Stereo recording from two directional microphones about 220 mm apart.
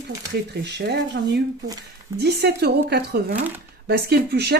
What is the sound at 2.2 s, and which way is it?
Speech, 50° right (ahead or behind).